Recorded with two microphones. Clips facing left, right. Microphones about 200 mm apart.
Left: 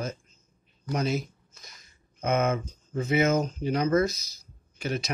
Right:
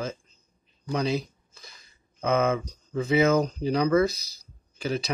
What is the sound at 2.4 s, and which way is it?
Speech, 30° right (ahead or behind).